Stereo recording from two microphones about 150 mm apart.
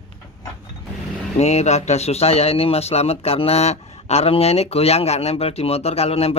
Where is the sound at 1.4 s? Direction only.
45° left (ahead or behind).